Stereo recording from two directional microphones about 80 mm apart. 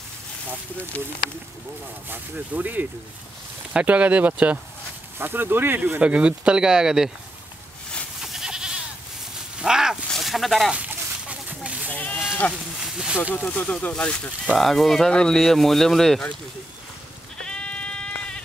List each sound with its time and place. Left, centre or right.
0.9 s speech: centre
2.0 s speech: right
5.9 s speech: centre
8.2 s goat: centre
9.6 s a sound: centre
10.2 s speech: centre
11.2 s a sound: centre
11.9 s sheep: centre
12.4 s speech: centre
12.8 s speech: centre
13.3 s speech: left
14.6 s speech: centre
17.4 s sheep: centre